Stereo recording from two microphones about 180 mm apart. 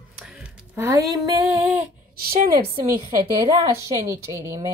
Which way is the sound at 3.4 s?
20° right (ahead or behind).